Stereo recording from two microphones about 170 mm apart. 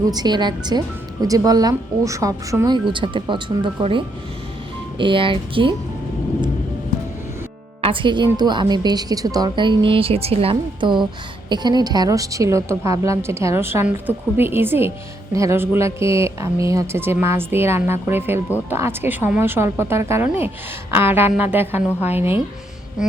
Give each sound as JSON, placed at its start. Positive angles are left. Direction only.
{"t": 0.1, "sound": "a woman's voice", "side_deg": -25}
{"t": 7.8, "sound": "a woman's voice", "side_deg": -30}